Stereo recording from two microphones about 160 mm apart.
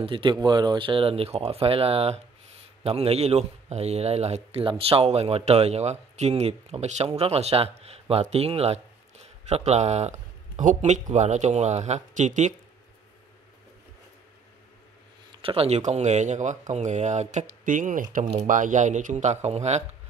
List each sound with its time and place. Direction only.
0.0 s a man's voice: 30° right (ahead or behind); by 12.5 s 50° right (ahead or behind)
15.4 s speech: 40° right (ahead or behind)